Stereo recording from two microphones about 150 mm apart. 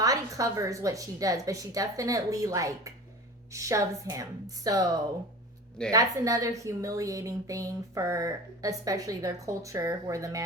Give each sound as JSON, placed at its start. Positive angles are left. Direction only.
{"t": 0.0, "sound": "a woman's voice", "side_deg": -25}